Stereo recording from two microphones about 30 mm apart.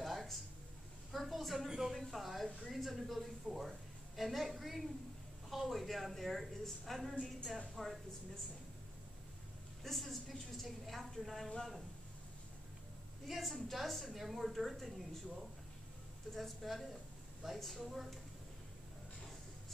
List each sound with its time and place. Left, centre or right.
0.0 s a sound: centre
1.9 s a woman's voice: centre
9.8 s a woman's voice: centre
13.3 s a woman's voice: centre
17.4 s a woman's voice: centre